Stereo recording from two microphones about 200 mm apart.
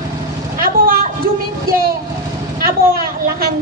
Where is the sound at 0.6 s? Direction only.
45° right (ahead or behind).